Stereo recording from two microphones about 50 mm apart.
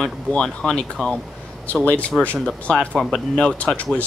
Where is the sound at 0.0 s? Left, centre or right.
Centre.